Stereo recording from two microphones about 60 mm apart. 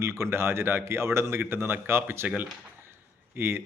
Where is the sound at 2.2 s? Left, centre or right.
Right.